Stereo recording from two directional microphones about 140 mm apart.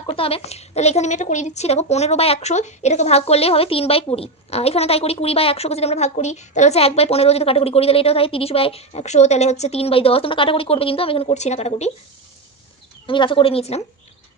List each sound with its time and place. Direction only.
0.0 s a woman's voice: 40° left (ahead or behind)
13.0 s a woman's voice: 35° left (ahead or behind)